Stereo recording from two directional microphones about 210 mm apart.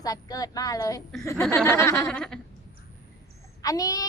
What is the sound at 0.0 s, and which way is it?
A woman's voice, 15° left (ahead or behind).